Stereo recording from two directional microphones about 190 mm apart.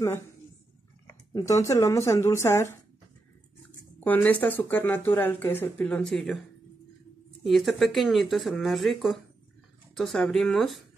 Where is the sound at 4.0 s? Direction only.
10° left (ahead or behind).